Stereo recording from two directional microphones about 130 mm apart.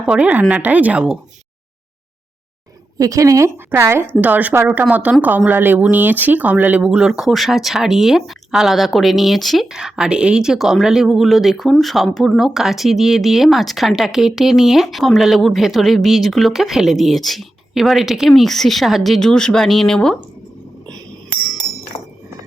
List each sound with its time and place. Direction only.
0.0 s speech: 10° right (ahead or behind)
3.0 s a woman's voice: 25° right (ahead or behind); by 20.1 s 5° left (ahead or behind)
21.9 s chink: 50° left (ahead or behind)